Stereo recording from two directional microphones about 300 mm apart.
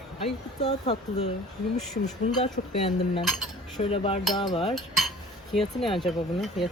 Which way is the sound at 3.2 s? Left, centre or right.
Centre.